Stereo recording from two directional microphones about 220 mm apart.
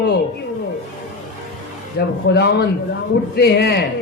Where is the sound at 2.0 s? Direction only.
45° left (ahead or behind).